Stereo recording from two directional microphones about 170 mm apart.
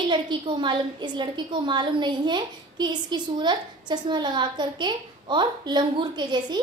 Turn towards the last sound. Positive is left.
turn(degrees=-25)  # may be behind; listen again after turning